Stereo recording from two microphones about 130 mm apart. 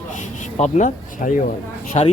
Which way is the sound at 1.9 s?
55° left (ahead or behind).